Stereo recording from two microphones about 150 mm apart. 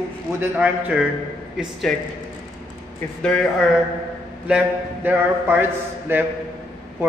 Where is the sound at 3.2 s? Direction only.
5° left (ahead or behind).